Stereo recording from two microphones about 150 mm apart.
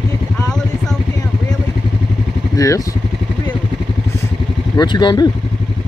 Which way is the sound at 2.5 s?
20° left (ahead or behind).